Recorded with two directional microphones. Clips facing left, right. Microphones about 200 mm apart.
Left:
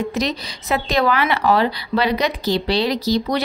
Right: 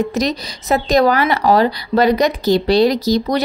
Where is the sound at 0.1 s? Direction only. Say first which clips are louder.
Right 4 dB; 45° right (ahead or behind).